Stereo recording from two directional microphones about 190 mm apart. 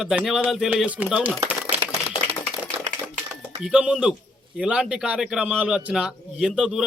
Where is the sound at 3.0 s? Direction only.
5° right (ahead or behind).